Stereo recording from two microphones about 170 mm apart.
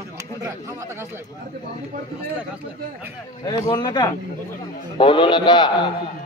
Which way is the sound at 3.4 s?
25° left (ahead or behind).